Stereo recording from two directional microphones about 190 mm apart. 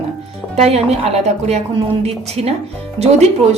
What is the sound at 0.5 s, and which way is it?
A woman's voice, 35° right (ahead or behind).